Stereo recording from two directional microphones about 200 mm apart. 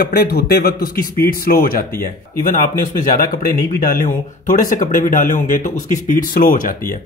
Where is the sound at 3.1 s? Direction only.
45° left (ahead or behind).